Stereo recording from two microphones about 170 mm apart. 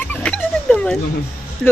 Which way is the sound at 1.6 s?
Centre (ahead or behind).